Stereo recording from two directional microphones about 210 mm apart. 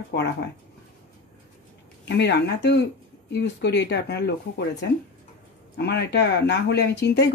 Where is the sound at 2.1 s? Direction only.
55° left (ahead or behind).